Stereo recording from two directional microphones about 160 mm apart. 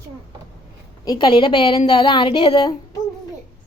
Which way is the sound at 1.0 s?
25° left (ahead or behind).